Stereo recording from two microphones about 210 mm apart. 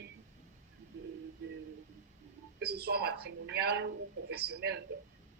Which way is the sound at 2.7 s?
50° right (ahead or behind).